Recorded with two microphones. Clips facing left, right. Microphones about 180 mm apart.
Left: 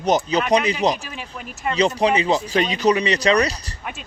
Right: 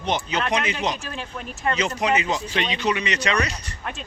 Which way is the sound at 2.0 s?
30° left (ahead or behind).